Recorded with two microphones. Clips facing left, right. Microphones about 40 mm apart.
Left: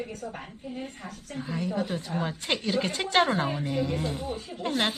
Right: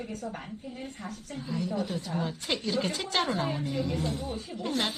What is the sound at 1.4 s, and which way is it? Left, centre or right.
A woman's voice, left.